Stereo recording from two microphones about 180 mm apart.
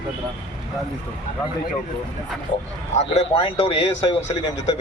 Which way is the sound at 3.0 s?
35° left (ahead or behind).